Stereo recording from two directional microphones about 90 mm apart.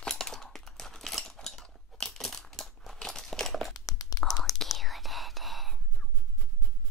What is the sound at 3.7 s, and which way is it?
Whispering, 40° left (ahead or behind).